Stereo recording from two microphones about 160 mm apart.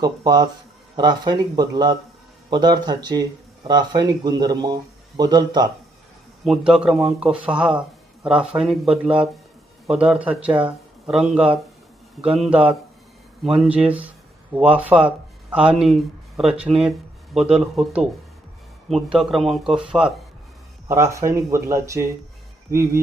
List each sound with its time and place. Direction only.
0.0 s speech: 25° right (ahead or behind)
6.4 s speech: centre (ahead or behind)
16.4 s speech: centre (ahead or behind)
20.8 s speech: 20° right (ahead or behind)